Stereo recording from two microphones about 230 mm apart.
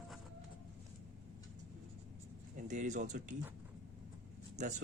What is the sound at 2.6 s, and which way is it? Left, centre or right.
Speech, right.